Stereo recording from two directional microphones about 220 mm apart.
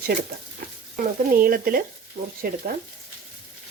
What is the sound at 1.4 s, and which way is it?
Frying, 40° right (ahead or behind).